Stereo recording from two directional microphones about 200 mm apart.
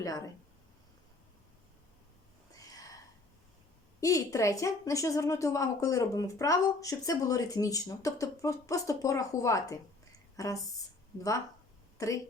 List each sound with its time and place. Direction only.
2.6 s a sound: 15° left (ahead or behind)
4.0 s a woman's voice: 15° left (ahead or behind)
11.9 s speech: 15° left (ahead or behind)